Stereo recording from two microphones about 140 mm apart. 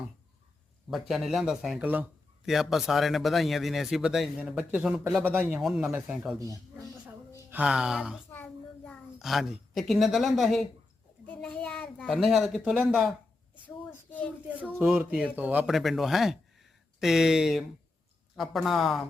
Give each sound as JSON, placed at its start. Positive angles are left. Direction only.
{"t": 0.9, "sound": "a man's voice", "side_deg": 0}
{"t": 7.6, "sound": "a man's voice", "side_deg": -5}
{"t": 8.3, "sound": "child singing", "side_deg": 10}
{"t": 9.1, "sound": "a man's voice", "side_deg": 0}
{"t": 13.7, "sound": "speech", "side_deg": 15}
{"t": 14.8, "sound": "a man's voice", "side_deg": -5}